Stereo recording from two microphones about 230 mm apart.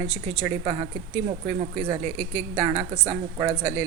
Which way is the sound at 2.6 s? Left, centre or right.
Centre.